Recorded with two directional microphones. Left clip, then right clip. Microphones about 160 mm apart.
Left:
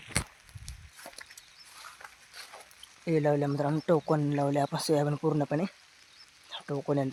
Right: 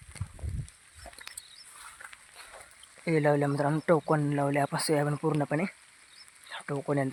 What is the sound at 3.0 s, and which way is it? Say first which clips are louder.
Speech: right 1 dB; 25° right (ahead or behind).